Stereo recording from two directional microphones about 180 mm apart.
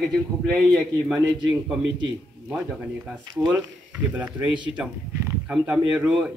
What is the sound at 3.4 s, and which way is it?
Speech, 10° right (ahead or behind).